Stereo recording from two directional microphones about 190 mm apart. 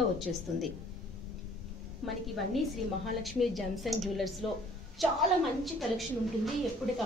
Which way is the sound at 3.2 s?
Centre (ahead or behind).